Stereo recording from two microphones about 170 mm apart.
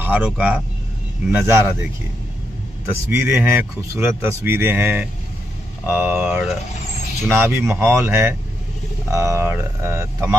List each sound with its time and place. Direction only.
0.0 s speech: 10° right (ahead or behind)
3.1 s speech: 15° right (ahead or behind)